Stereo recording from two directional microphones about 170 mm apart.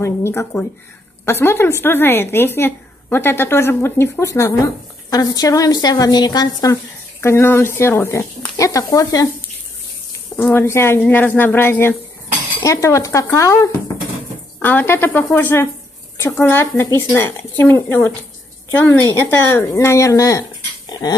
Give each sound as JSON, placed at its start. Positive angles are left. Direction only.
{"t": 0.0, "sound": "a woman's voice", "side_deg": 15}
{"t": 10.3, "sound": "a woman's voice", "side_deg": 15}